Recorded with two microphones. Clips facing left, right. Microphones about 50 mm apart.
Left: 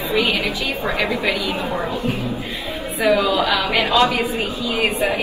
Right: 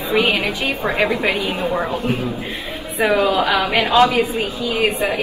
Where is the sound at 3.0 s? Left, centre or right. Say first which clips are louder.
Right 1 dB; right.